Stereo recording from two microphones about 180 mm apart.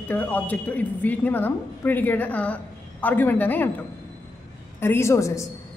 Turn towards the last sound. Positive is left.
turn(degrees=15)  # may be behind; listen again after turning